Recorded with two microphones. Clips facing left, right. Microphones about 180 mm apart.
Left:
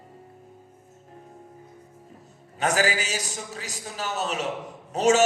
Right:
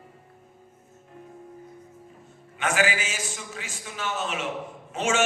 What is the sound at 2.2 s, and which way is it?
A man's voice, 40° left (ahead or behind).